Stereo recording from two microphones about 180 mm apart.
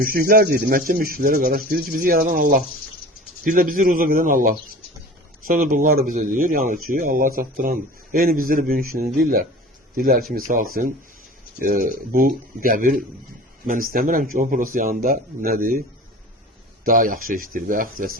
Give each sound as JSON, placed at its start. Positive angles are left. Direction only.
{"t": 0.0, "sound": "speech", "side_deg": -55}
{"t": 16.8, "sound": "speech", "side_deg": -50}